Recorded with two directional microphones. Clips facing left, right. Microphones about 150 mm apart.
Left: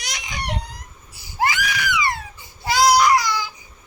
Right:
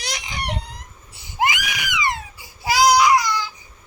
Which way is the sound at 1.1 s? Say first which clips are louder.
Even; 20° right (ahead or behind).